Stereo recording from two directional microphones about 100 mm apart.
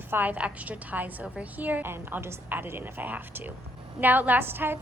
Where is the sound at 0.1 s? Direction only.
15° right (ahead or behind).